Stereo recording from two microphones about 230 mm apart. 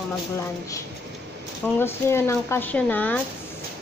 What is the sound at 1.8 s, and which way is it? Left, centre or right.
Speech, centre.